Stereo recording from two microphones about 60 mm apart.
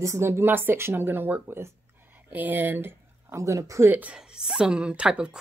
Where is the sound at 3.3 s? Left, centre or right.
Right.